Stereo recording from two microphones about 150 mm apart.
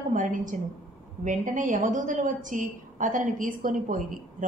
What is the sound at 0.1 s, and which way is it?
A woman's voice, 60° right (ahead or behind).